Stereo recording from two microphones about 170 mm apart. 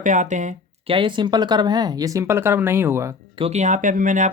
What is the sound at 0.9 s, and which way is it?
Speech, 30° right (ahead or behind).